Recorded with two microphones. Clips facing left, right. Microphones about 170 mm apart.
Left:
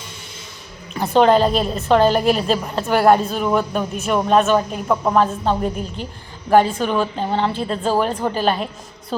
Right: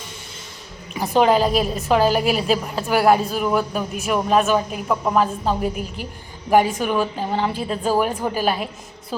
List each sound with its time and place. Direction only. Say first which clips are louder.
0.9 s a woman's voice: left 3 dB; 10° right (ahead or behind)